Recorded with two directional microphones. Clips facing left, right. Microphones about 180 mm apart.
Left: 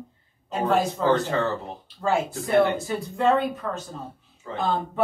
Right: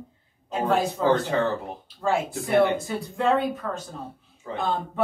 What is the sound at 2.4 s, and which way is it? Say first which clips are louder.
Speech: even; 15° right (ahead or behind).